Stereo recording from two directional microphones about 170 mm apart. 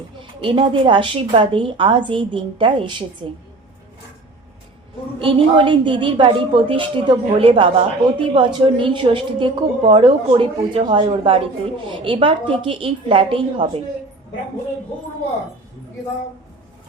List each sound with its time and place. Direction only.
0.2 s a woman's voice: 30° right (ahead or behind)
5.2 s a woman's voice: 30° right (ahead or behind)